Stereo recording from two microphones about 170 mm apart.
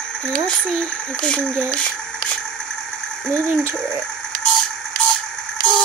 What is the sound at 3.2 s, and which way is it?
Speech, 5° left (ahead or behind).